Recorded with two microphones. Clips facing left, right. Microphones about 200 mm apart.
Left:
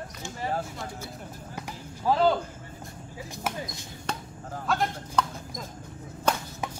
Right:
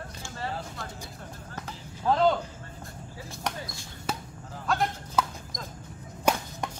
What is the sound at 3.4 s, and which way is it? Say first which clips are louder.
Basketball bounce: left 2 dB; 15° left (ahead or behind).